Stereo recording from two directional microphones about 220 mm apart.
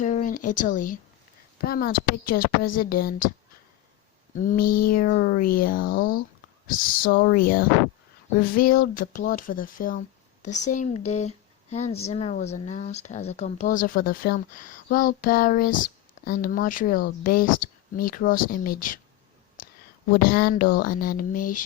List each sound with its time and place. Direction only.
0.0 s speech: 35° left (ahead or behind)
4.4 s speech: 40° left (ahead or behind)
20.1 s speech: 40° left (ahead or behind)